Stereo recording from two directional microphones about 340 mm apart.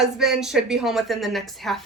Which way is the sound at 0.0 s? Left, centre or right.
Centre.